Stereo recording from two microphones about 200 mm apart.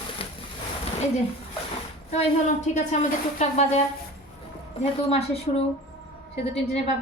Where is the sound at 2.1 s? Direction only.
35° left (ahead or behind).